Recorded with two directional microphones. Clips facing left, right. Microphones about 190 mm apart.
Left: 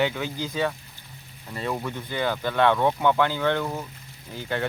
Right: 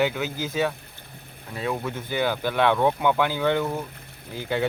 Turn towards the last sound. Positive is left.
turn(degrees=-10)  # may be behind; listen again after turning